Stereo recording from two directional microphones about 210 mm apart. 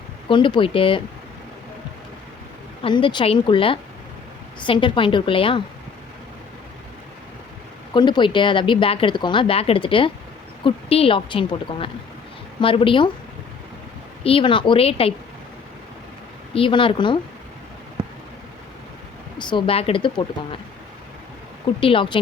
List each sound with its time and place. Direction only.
0.3 s speech: 25° left (ahead or behind)
2.8 s speech: 25° left (ahead or behind)
7.9 s speech: 20° left (ahead or behind)
14.3 s speech: 25° left (ahead or behind)
16.6 s speech: 25° left (ahead or behind)
19.4 s speech: 20° left (ahead or behind)
21.8 s speech: 25° left (ahead or behind)